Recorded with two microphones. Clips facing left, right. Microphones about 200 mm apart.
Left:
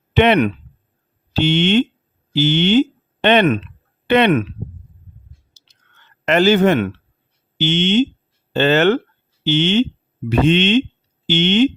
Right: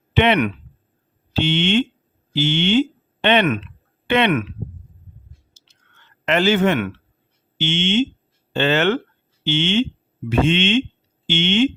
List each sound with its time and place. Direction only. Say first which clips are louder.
0.1 s a man's voice: left 3 dB; 40° left (ahead or behind)
5.6 s chewing: right 2 dB; 35° left (ahead or behind)
6.2 s a man's voice: left 4 dB; 40° left (ahead or behind)